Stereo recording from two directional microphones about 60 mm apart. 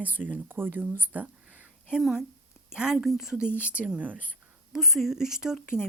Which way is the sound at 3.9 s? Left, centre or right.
Right.